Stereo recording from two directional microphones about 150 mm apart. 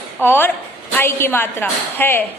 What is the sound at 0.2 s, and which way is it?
A woman's voice, 15° left (ahead or behind).